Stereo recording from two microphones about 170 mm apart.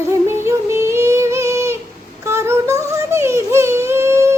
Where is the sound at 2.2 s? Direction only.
15° right (ahead or behind).